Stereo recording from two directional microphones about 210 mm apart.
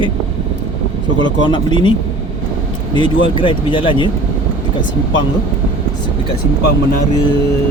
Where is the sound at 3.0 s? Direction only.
25° left (ahead or behind).